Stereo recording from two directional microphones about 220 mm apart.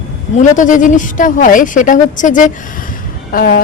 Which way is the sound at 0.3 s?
35° left (ahead or behind).